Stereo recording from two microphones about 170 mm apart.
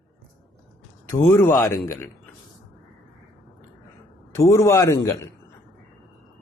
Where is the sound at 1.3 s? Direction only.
15° left (ahead or behind).